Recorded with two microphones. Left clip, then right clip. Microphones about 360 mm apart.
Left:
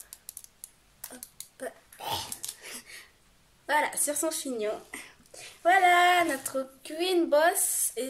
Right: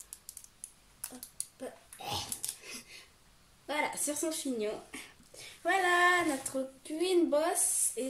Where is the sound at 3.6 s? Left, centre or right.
Left.